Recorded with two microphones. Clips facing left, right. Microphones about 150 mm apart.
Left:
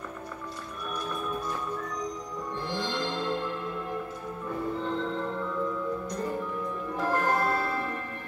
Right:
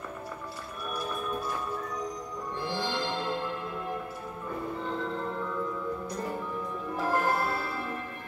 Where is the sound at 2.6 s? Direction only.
5° right (ahead or behind).